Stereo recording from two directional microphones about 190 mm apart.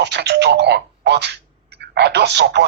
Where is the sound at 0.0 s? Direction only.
65° right (ahead or behind).